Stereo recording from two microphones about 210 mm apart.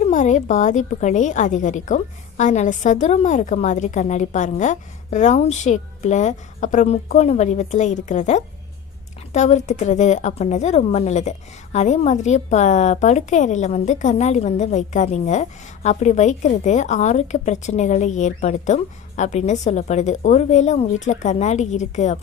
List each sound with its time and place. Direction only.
0.0 s a woman's voice: 35° left (ahead or behind)